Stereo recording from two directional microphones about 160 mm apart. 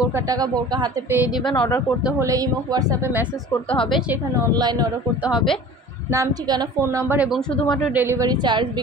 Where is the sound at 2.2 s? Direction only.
20° right (ahead or behind).